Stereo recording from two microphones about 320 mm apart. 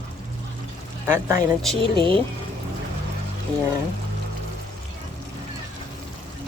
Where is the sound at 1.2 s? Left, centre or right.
Centre.